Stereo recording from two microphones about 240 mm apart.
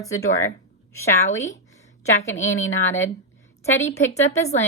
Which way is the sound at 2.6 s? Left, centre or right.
Left.